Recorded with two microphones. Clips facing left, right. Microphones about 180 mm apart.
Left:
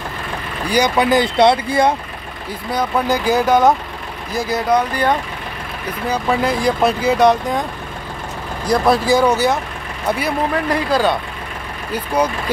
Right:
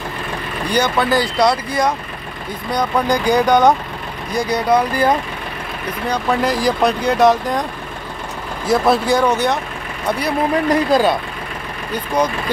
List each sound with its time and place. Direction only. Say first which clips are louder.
0.7 s speech: left 2 dB; 15° left (ahead or behind)
2.7 s speech: right 1 dB; 5° left (ahead or behind)
8.6 s speech: even; centre (ahead or behind)
10.9 s speech: even; 15° right (ahead or behind)
11.9 s speech: even; 10° left (ahead or behind)